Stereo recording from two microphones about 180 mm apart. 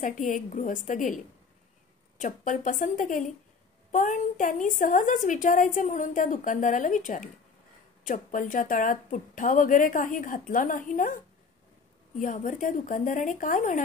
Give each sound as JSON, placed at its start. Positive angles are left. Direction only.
{"t": 0.0, "sound": "a woman's voice", "side_deg": 45}
{"t": 12.2, "sound": "a woman's voice", "side_deg": 45}